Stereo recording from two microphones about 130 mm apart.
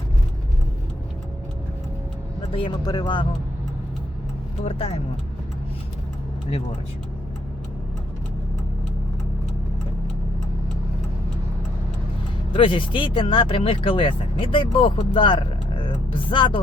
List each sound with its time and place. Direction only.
2.5 s speech: 40° left (ahead or behind)
4.6 s speech: 45° left (ahead or behind)
12.5 s speech: 40° left (ahead or behind)